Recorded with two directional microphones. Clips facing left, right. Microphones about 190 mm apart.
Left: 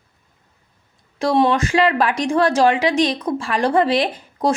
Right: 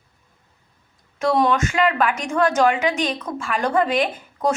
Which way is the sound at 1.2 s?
30° left (ahead or behind).